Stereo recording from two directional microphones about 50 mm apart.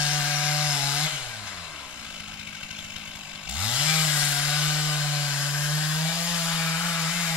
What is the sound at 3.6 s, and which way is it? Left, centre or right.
Chainsaw, centre.